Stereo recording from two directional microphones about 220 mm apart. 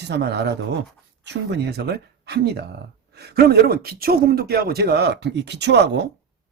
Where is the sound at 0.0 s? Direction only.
50° right (ahead or behind).